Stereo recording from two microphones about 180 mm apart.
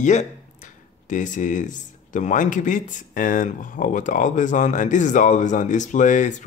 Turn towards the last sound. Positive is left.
turn(degrees=45)  # may be behind; listen again after turning